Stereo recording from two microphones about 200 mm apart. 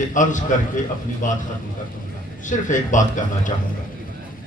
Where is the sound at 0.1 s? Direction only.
40° left (ahead or behind).